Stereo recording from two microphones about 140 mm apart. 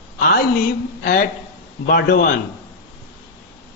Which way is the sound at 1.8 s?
90° left.